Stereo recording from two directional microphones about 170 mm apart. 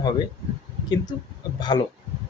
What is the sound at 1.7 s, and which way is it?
Speech, 25° left (ahead or behind).